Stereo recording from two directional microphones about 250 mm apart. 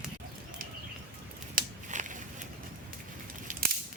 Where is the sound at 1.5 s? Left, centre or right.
Right.